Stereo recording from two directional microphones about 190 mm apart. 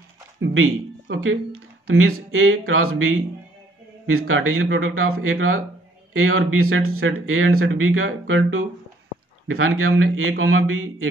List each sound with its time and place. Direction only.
0.4 s speech: 85° right